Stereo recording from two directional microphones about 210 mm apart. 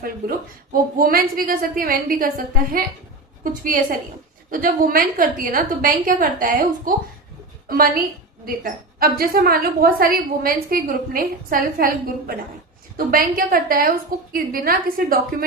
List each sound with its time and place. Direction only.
0.9 s a woman's voice: 45° right (ahead or behind)
13.0 s a woman's voice: 45° right (ahead or behind)